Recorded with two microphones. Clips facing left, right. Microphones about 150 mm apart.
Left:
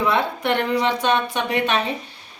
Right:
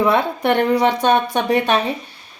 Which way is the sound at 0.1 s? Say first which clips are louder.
Right 4 dB; 45° right (ahead or behind).